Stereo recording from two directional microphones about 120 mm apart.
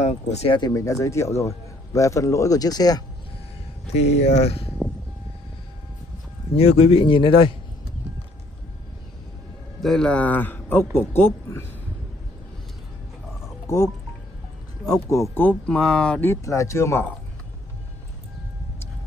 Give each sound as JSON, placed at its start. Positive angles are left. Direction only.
{"t": 0.0, "sound": "speech", "side_deg": 70}
{"t": 0.5, "sound": "a man's voice", "side_deg": 35}
{"t": 3.8, "sound": "speech", "side_deg": 65}
{"t": 6.5, "sound": "speech", "side_deg": 60}
{"t": 9.8, "sound": "a man's voice", "side_deg": 5}
{"t": 14.9, "sound": "a man's voice", "side_deg": 25}
{"t": 15.3, "sound": "a man's voice", "side_deg": 10}
{"t": 16.3, "sound": "a man's voice", "side_deg": 25}